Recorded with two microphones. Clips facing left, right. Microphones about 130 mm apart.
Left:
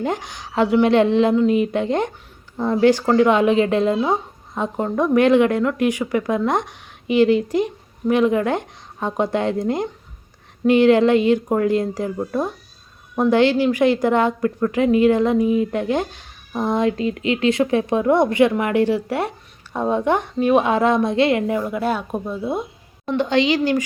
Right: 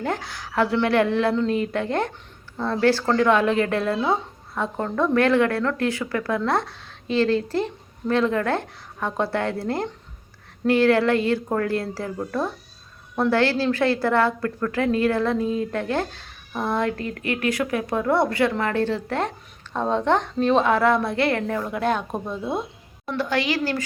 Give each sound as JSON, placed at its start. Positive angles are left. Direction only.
{"t": 0.0, "sound": "a woman's voice", "side_deg": 20}
{"t": 23.0, "sound": "a woman's voice", "side_deg": 20}